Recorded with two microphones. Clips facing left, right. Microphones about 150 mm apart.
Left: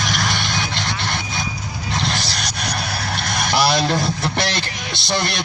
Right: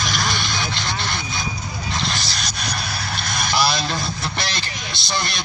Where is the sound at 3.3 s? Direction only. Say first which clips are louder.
Left 3 dB; 65° left (ahead or behind).